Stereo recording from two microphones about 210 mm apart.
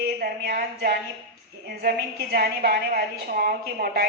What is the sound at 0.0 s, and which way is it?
Speech, 45° right (ahead or behind).